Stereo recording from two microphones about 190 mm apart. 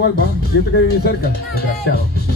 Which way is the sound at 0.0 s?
60° left (ahead or behind).